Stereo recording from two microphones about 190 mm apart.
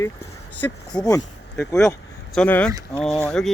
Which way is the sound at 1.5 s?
15° left (ahead or behind).